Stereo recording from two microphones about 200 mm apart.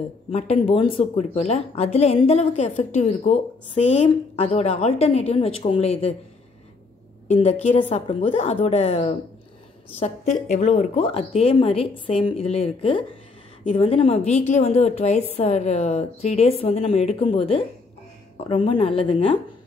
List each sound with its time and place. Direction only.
0.3 s a woman's voice: 30° left (ahead or behind)
7.2 s a woman's voice: 35° left (ahead or behind)